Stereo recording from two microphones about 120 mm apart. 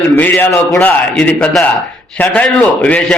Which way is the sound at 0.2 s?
15° left (ahead or behind).